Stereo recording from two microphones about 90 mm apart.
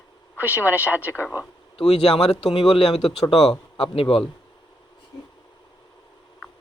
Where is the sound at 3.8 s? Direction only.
85° left.